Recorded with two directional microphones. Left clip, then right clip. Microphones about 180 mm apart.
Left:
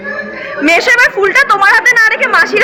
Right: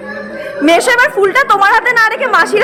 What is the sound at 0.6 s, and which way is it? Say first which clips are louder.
A woman's voice: left 1 dB; 25° right (ahead or behind).